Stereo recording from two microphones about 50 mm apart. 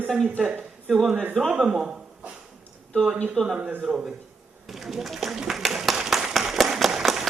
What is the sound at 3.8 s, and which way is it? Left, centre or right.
Speech, centre.